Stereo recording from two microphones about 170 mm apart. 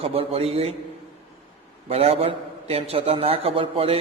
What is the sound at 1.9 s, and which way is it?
A man's voice, 35° right (ahead or behind).